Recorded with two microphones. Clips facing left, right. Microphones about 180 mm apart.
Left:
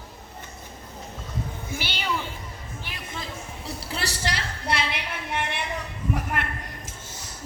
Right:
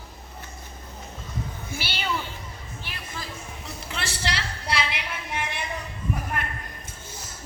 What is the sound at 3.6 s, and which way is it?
A woman's voice, 35° left (ahead or behind).